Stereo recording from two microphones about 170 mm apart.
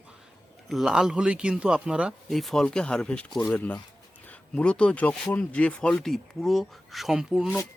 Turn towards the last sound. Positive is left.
turn(degrees=0)  # may be behind; listen again after turning